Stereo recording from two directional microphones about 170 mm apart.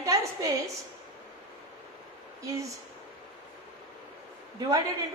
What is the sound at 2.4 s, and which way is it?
Speech, 20° right (ahead or behind).